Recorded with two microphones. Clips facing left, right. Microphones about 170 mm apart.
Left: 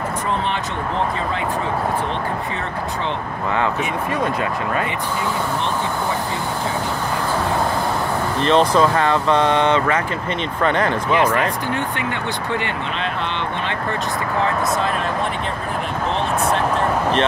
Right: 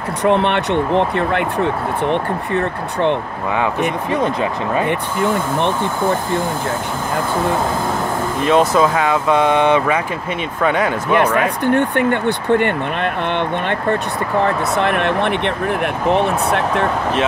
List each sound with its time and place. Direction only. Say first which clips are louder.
0.2 s speech: right 12 dB; 65° right (ahead or behind)
4.2 s speech: right 3 dB; 20° right (ahead or behind)
4.8 s speech: right 5 dB; 50° right (ahead or behind)
8.5 s speech: right 2 dB; 5° right (ahead or behind)
11.6 s speech: right 8 dB; 55° right (ahead or behind)
14.8 s speech: right 5 dB; 70° right (ahead or behind)